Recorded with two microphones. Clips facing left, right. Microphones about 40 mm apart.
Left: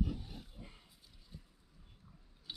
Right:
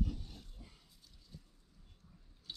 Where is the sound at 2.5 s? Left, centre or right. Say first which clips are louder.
Left 1 dB; centre.